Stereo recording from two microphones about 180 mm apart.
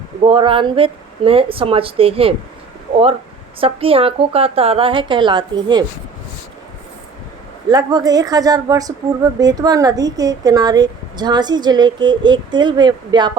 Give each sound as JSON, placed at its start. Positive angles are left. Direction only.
{"t": 0.3, "sound": "a woman's voice", "side_deg": -30}
{"t": 3.6, "sound": "a woman's voice", "side_deg": -30}
{"t": 7.7, "sound": "a woman's voice", "side_deg": -20}